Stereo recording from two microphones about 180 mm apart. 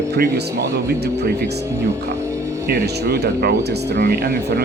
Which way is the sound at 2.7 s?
60° right (ahead or behind).